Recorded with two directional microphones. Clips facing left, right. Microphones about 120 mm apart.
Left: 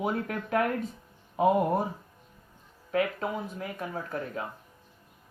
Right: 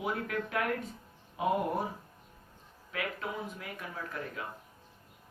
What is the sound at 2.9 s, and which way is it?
Speech, 35° left (ahead or behind).